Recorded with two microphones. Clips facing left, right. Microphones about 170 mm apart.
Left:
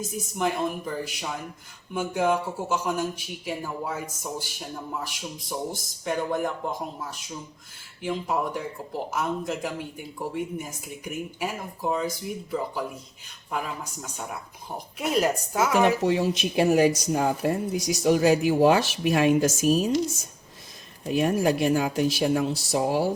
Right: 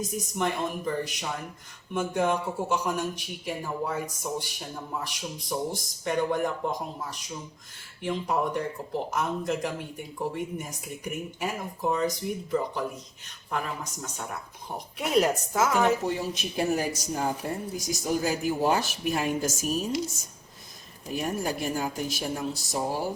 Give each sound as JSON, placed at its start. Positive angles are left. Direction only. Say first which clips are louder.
{"t": 0.3, "sound": "a man's voice", "louder": "left 3 dB", "side_deg": 0}
{"t": 14.9, "sound": "a man's voice", "louder": "even", "side_deg": 5}
{"t": 15.9, "sound": "speech", "louder": "left 4 dB", "side_deg": 80}
{"t": 21.0, "sound": "speech", "louder": "left 7 dB", "side_deg": 90}